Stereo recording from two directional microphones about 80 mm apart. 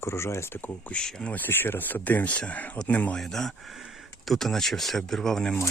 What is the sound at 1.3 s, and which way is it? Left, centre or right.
Speech, left.